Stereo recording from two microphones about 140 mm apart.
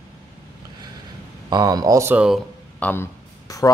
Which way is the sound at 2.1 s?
5° right (ahead or behind).